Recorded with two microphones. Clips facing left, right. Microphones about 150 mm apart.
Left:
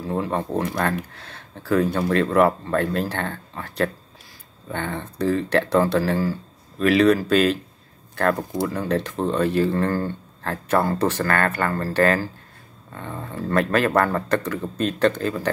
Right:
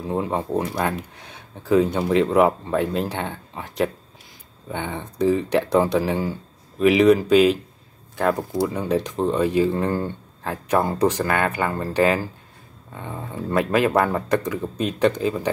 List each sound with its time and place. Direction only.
0.0 s speech: 15° right (ahead or behind)